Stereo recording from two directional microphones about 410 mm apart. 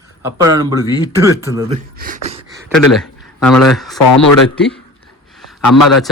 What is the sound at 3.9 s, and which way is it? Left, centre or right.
Speech, left.